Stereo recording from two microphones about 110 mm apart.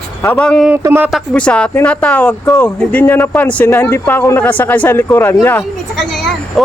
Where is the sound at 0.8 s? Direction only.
20° right (ahead or behind).